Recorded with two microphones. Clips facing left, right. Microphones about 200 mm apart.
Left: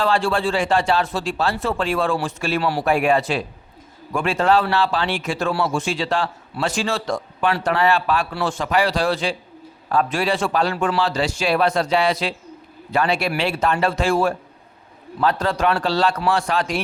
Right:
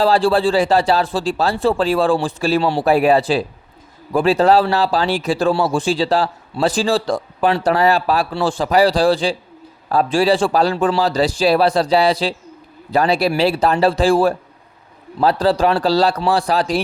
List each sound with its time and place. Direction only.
0.0 s a man's voice: 35° right (ahead or behind)